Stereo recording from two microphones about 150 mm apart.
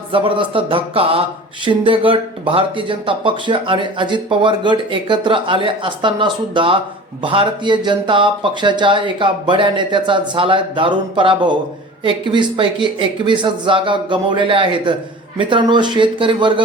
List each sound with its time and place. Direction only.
0.1 s speech: 35° right (ahead or behind)